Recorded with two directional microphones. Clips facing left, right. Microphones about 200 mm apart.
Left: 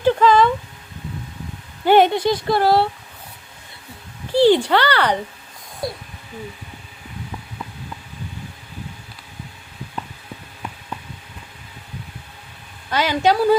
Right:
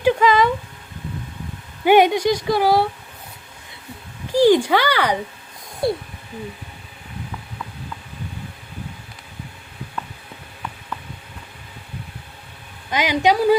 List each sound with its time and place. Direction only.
0.0 s a sound: 15° right (ahead or behind)
1.8 s speech: 15° right (ahead or behind)
4.3 s speech: 10° right (ahead or behind)
12.9 s speech: 15° right (ahead or behind)